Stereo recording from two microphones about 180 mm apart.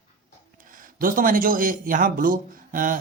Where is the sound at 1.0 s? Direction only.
50° right (ahead or behind).